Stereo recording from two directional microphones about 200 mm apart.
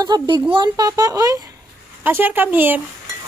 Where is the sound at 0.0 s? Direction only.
20° right (ahead or behind).